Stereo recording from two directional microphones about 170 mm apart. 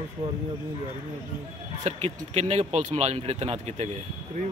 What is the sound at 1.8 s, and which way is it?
Speech, 40° right (ahead or behind).